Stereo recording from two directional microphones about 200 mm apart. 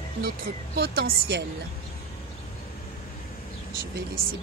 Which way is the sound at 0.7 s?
50° right (ahead or behind).